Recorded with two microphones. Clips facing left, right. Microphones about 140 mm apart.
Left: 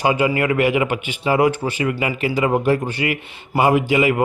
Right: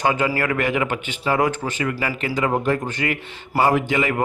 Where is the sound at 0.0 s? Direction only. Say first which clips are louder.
Left 3 dB; 10° left (ahead or behind).